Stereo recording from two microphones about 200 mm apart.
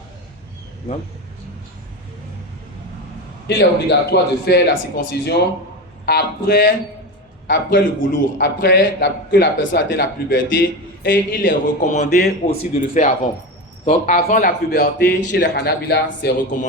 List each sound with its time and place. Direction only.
3.4 s a man's voice: 60° left (ahead or behind); by 12.0 s 40° left (ahead or behind)
12.0 s a man's voice: 50° left (ahead or behind)
13.8 s a man's voice: 40° left (ahead or behind); by 16.3 s 55° left (ahead or behind)